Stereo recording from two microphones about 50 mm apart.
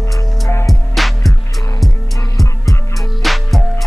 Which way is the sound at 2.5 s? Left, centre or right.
Left.